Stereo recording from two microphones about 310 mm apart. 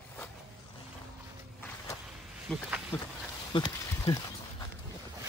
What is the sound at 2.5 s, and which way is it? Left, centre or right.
Speech, centre.